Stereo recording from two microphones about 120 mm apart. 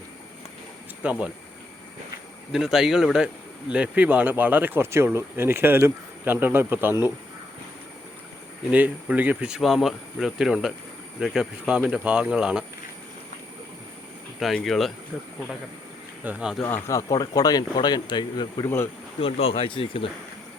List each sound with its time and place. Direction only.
1.0 s speech: 15° right (ahead or behind)
2.5 s speech: 5° right (ahead or behind)
8.7 s speech: 15° right (ahead or behind)
14.3 s speech: centre (ahead or behind)
16.2 s speech: 10° right (ahead or behind)
16.6 s speech: 20° left (ahead or behind)
19.2 s speech: 55° left (ahead or behind)